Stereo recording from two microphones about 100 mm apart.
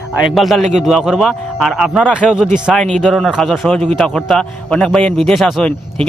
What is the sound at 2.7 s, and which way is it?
A man's voice, 5° left (ahead or behind).